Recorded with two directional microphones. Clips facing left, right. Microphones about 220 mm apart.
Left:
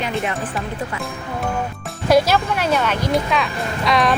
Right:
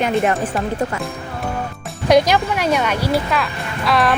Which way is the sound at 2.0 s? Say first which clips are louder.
Right 2 dB; 15° right (ahead or behind).